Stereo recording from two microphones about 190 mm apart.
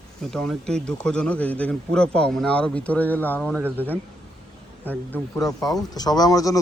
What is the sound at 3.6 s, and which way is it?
Speech, 10° right (ahead or behind).